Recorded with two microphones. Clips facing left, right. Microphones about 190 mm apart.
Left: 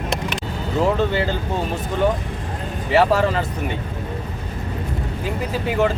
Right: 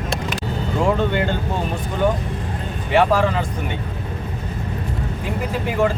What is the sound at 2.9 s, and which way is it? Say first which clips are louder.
Speech: even; centre (ahead or behind).